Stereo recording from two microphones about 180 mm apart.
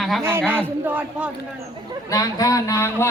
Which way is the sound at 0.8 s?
10° right (ahead or behind).